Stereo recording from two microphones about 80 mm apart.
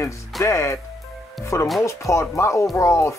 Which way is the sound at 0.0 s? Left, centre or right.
Left.